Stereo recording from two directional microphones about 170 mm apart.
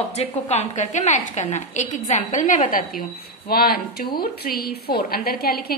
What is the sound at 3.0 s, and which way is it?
Speech, 60° left (ahead or behind).